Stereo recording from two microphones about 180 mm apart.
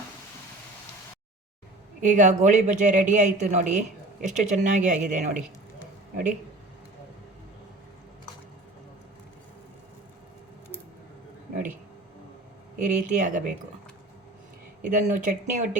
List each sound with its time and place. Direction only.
2.0 s speech: 45° right (ahead or behind)
12.8 s speech: 45° right (ahead or behind)
14.8 s speech: 45° right (ahead or behind)